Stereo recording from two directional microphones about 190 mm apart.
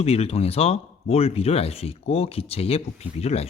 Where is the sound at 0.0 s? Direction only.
35° left (ahead or behind).